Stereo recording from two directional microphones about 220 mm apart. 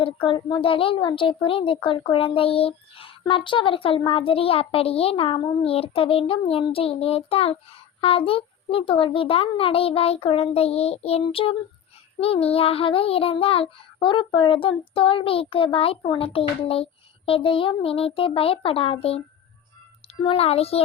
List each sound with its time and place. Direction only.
0.0 s a woman's voice: 25° left (ahead or behind)
20.2 s a woman's voice: 25° left (ahead or behind)